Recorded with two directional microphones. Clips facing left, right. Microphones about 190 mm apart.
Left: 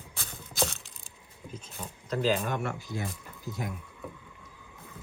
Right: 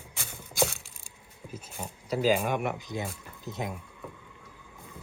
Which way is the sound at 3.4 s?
20° right (ahead or behind).